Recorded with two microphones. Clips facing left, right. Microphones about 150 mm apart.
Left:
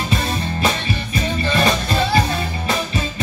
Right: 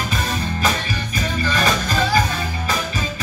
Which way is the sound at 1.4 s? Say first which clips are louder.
Left 2 dB; 25° left (ahead or behind).